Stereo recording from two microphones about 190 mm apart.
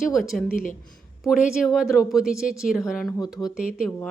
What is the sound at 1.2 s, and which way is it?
Speech, centre (ahead or behind).